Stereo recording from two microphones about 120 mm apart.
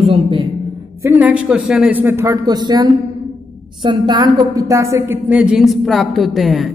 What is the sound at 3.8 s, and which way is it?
A woman's voice, 35° right (ahead or behind).